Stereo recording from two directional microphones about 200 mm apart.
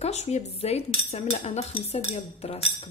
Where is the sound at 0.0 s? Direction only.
35° left (ahead or behind).